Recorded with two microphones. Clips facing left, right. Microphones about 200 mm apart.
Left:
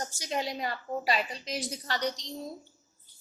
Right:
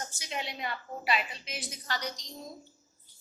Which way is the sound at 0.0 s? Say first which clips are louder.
Left 5 dB; 40° left (ahead or behind).